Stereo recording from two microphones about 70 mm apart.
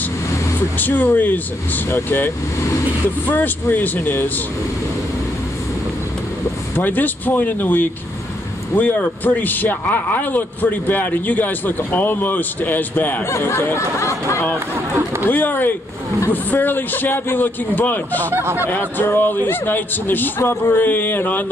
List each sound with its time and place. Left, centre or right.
0.6 s speech: left
6.8 s speech: left
13.2 s speech: left
15.2 s speech: left
18.3 s speech: right
18.7 s speech: left